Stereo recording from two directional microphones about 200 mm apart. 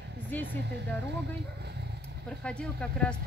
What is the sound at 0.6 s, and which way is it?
Speech, 55° right (ahead or behind).